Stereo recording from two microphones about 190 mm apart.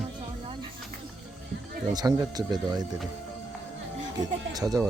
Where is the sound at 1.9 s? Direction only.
20° right (ahead or behind).